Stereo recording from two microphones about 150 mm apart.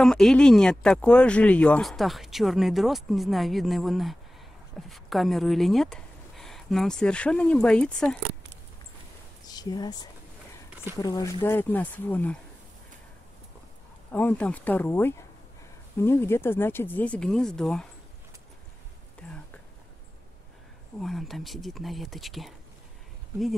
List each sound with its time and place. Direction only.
0.0 s speech: 5° left (ahead or behind)
9.5 s speech: 25° left (ahead or behind)
11.4 s speech: 10° left (ahead or behind)
14.1 s speech: 10° left (ahead or behind)
19.2 s speech: 10° left (ahead or behind)
21.0 s speech: centre (ahead or behind)